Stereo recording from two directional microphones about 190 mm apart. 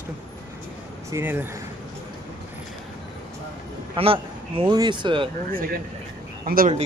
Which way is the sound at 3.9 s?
30° right (ahead or behind).